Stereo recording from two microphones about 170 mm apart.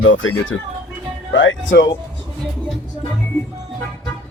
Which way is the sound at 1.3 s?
90° left.